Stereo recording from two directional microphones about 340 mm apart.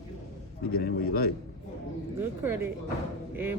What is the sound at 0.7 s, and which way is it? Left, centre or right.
Speech, left.